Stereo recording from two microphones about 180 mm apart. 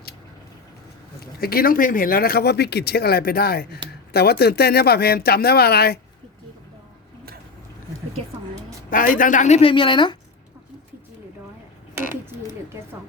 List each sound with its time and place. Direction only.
1.2 s speech: 55° left (ahead or behind)
8.9 s speech: 50° left (ahead or behind); by 10.2 s 25° left (ahead or behind)